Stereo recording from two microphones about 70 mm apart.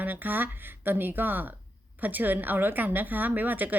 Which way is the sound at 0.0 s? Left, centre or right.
Right.